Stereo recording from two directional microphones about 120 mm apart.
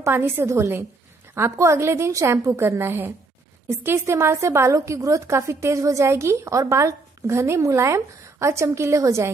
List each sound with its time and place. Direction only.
0.0 s a woman's voice: 20° right (ahead or behind)